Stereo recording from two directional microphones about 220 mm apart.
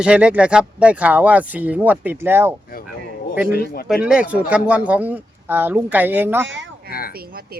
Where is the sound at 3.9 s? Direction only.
5° right (ahead or behind).